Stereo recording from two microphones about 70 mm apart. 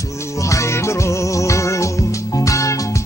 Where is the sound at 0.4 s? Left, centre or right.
Left.